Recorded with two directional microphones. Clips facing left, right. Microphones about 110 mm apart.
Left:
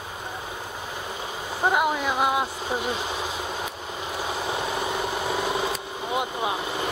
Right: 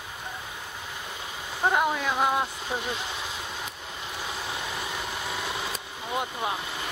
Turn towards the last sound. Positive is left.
turn(degrees=35)  # may be behind; listen again after turning